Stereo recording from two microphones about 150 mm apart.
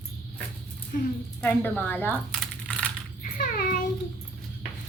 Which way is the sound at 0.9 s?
75° left (ahead or behind).